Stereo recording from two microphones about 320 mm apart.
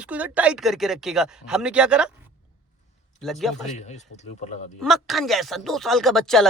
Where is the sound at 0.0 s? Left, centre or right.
Centre.